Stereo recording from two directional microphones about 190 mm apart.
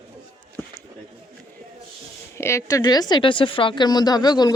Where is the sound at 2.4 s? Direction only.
15° left (ahead or behind).